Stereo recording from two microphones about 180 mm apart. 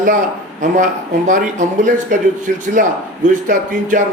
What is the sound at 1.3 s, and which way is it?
Speech, 45° right (ahead or behind).